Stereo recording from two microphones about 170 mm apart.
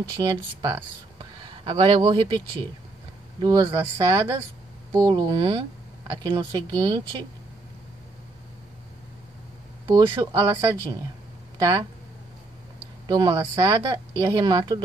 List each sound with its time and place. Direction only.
0.1 s speech: 20° right (ahead or behind)
3.3 s speech: 20° right (ahead or behind)
9.8 s speech: 20° right (ahead or behind)
11.5 s a sound: 20° right (ahead or behind)
13.1 s speech: 20° right (ahead or behind)